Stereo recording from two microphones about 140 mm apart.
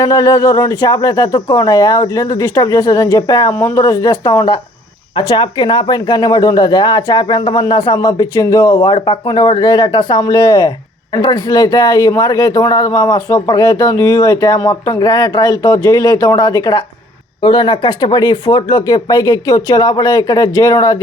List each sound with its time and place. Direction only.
0.0 s speech: 25° left (ahead or behind)